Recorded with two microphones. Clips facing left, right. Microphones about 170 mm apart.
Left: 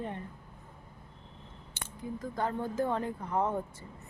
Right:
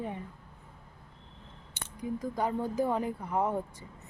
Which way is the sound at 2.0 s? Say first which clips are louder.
Right 3 dB; 15° right (ahead or behind).